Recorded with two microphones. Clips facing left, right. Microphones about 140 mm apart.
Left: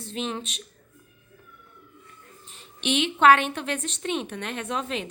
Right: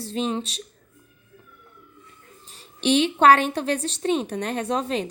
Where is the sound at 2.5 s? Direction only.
35° right (ahead or behind).